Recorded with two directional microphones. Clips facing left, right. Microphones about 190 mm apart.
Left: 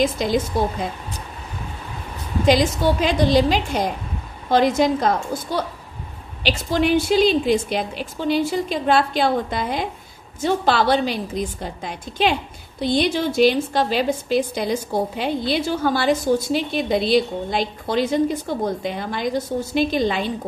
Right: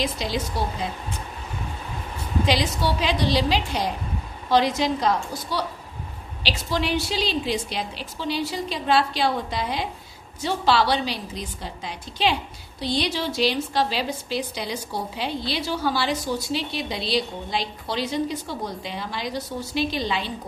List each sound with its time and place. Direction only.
0.0 s a woman's voice: 50° left (ahead or behind)
2.4 s a woman's voice: 45° left (ahead or behind)